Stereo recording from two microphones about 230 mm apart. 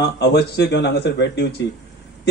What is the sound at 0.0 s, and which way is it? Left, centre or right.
A man's voice, left.